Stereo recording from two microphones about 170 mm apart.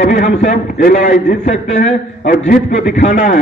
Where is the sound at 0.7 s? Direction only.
65° left (ahead or behind).